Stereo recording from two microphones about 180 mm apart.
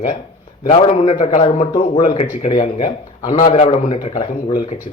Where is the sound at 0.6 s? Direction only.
35° left (ahead or behind).